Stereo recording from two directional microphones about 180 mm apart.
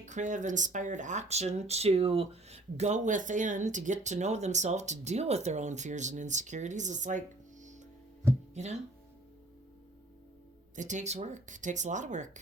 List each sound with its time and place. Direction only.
0.0 s speech: 45° right (ahead or behind)
8.5 s speech: 40° right (ahead or behind)
10.8 s speech: 40° right (ahead or behind)